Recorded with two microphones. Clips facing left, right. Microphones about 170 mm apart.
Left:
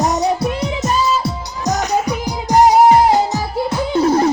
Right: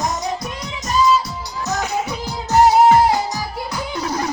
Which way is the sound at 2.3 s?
15° left (ahead or behind).